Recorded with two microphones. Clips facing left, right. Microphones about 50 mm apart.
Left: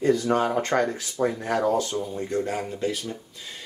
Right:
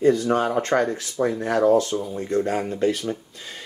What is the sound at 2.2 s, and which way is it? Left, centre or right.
Speech, right.